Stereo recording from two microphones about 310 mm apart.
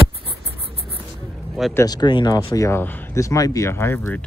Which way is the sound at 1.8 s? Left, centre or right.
Centre.